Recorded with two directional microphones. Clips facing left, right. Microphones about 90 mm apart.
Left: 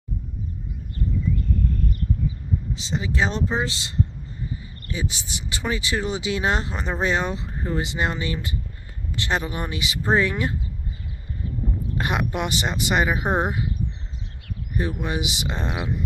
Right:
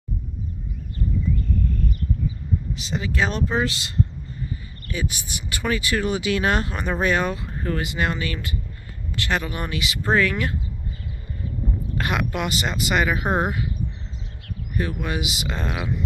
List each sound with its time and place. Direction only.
2.7 s speech: 25° left (ahead or behind)
4.5 s a sound: 20° left (ahead or behind)
5.5 s speech: 20° left (ahead or behind)
12.0 s speech: 30° left (ahead or behind)
14.7 s speech: 30° left (ahead or behind)